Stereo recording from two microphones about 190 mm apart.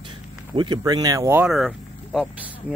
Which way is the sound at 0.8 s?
20° right (ahead or behind).